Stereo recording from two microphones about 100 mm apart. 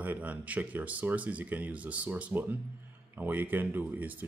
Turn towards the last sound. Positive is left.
turn(degrees=-15)  # may be behind; listen again after turning